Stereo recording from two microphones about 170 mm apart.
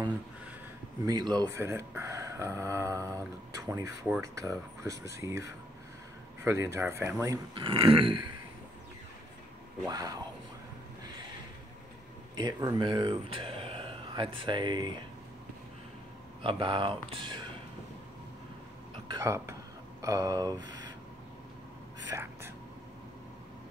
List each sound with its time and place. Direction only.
1.0 s speech: 25° right (ahead or behind)
7.5 s speech: 30° right (ahead or behind)
9.8 s speech: 20° right (ahead or behind)
12.4 s speech: 25° right (ahead or behind)
16.4 s speech: 30° right (ahead or behind)
19.0 s speech: 20° right (ahead or behind)
22.1 s speech: 15° right (ahead or behind)